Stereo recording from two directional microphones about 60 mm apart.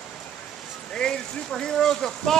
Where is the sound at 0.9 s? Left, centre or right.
Centre.